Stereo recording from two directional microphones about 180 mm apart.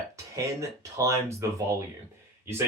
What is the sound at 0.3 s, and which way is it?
Speech, 15° right (ahead or behind).